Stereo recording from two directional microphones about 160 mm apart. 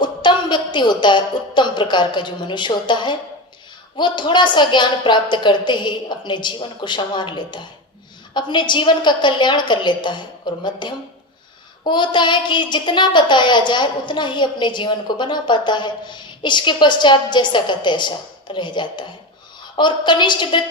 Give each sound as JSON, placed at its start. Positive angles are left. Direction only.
{"t": 0.0, "sound": "a child's voice", "side_deg": 30}